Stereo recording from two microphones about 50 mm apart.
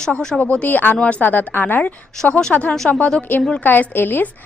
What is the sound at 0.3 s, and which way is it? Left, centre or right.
A woman's voice, left.